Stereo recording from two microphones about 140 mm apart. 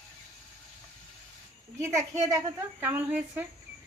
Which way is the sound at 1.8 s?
20° right (ahead or behind).